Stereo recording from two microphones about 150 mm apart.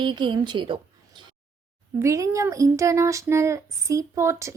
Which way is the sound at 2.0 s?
20° right (ahead or behind).